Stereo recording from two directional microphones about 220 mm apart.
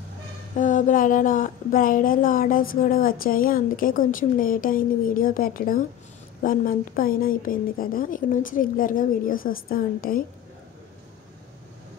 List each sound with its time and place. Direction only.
0.6 s a woman's voice: 35° left (ahead or behind)